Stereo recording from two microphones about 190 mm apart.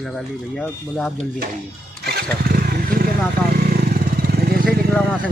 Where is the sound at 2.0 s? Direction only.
55° right (ahead or behind).